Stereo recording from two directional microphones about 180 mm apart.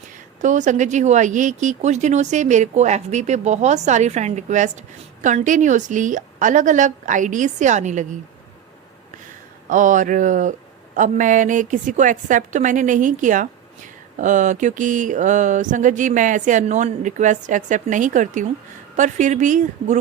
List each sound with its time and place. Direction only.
0.4 s a woman's voice: 45° right (ahead or behind)
9.6 s a woman's voice: 45° right (ahead or behind)